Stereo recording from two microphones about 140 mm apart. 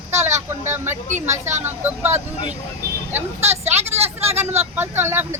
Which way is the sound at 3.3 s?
50° right (ahead or behind).